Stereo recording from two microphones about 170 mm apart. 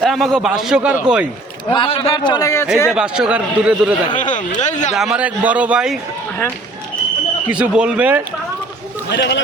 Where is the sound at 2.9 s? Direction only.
5° right (ahead or behind).